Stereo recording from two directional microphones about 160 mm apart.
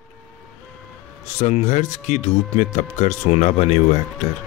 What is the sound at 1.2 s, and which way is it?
Speech, 45° left (ahead or behind).